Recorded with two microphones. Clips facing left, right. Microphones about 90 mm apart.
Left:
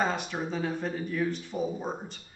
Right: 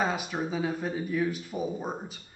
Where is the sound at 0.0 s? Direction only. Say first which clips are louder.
Even; 5° right (ahead or behind).